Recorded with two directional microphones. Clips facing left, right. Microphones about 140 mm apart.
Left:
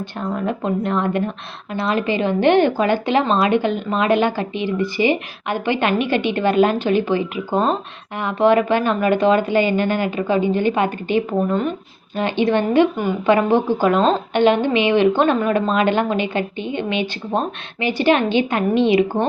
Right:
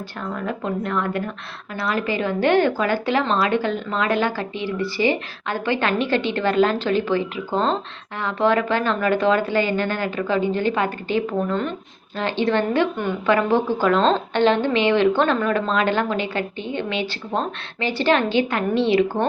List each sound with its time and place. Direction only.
0.2 s a woman's voice: 25° left (ahead or behind)